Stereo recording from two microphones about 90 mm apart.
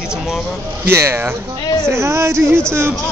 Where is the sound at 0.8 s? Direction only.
30° right (ahead or behind).